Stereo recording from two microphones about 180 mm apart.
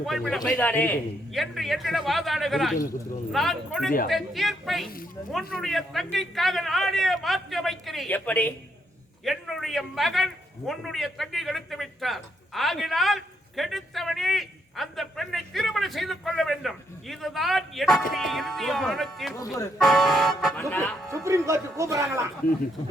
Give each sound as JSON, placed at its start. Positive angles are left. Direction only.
{"t": 0.0, "sound": "a man's voice", "side_deg": 0}
{"t": 21.1, "sound": "speech", "side_deg": -15}